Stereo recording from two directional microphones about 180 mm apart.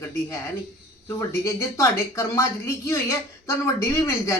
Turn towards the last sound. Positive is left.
turn(degrees=15)  # may be behind; listen again after turning